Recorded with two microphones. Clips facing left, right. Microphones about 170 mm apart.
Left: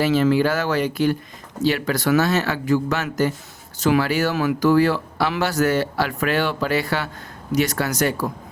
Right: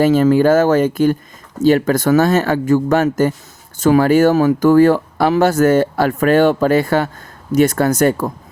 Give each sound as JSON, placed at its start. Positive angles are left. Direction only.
{"t": 0.0, "sound": "speech", "side_deg": -45}